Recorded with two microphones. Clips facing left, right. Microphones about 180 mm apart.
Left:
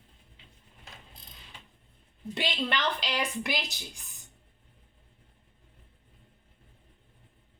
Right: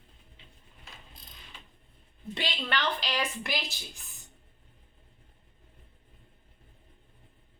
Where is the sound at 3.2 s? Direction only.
15° left (ahead or behind).